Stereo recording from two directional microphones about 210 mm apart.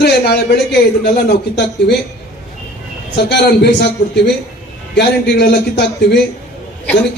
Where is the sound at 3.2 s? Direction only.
55° left (ahead or behind).